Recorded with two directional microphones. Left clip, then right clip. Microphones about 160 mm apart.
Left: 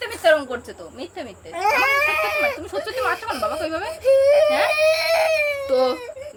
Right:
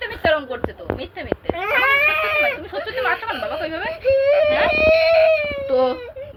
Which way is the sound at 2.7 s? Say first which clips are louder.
Right 1 dB; 20° left (ahead or behind).